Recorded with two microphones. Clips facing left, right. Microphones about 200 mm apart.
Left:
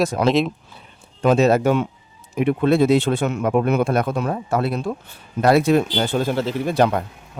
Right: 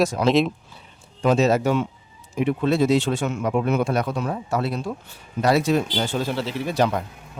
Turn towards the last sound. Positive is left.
turn(degrees=55)  # may be behind; listen again after turning